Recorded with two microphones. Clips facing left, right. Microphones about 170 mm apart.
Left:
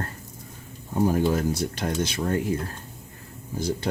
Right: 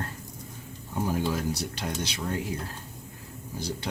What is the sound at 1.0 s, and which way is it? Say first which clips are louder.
Speech: left 6 dB; 45° left (ahead or behind).